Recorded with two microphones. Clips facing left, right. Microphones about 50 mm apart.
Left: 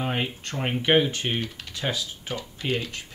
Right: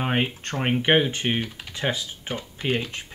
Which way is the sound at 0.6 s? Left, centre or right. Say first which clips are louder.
Right 1 dB; right.